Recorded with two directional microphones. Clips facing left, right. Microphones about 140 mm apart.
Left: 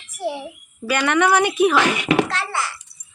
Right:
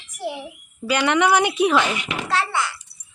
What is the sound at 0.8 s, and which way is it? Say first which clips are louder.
Speech: even; 15° right (ahead or behind).